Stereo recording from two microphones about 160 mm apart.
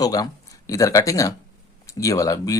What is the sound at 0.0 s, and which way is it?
Speech, 25° left (ahead or behind).